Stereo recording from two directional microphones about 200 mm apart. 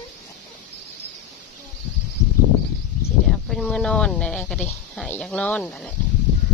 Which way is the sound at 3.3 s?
Centre (ahead or behind).